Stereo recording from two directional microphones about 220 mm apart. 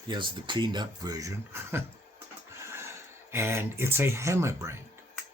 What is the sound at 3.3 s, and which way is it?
Speech, 10° right (ahead or behind).